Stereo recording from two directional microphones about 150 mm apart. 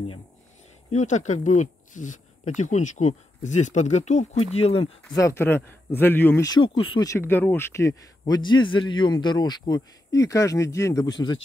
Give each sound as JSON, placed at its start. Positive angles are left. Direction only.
{"t": 0.9, "sound": "speech", "side_deg": 50}
{"t": 5.1, "sound": "speech", "side_deg": 20}
{"t": 6.4, "sound": "speech", "side_deg": 30}
{"t": 7.1, "sound": "speech", "side_deg": 15}